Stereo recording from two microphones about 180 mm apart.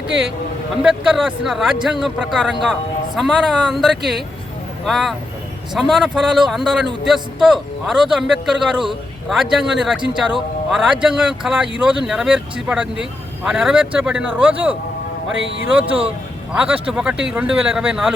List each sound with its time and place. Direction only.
0.8 s speech: centre (ahead or behind)
15.4 s speech: 90° right
16.6 s speech: 5° right (ahead or behind)